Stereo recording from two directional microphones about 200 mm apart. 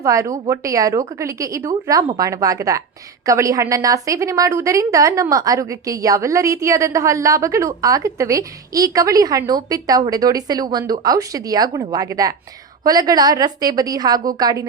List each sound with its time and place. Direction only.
0.0 s a woman's voice: 15° right (ahead or behind)